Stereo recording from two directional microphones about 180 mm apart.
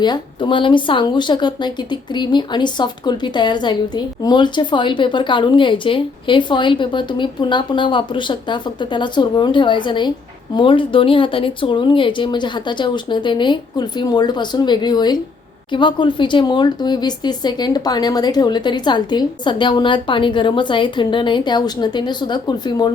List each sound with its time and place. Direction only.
0.0 s speech: 25° left (ahead or behind)